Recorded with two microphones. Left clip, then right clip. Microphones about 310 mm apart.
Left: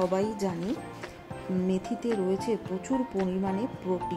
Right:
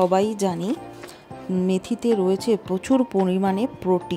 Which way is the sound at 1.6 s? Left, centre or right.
Right.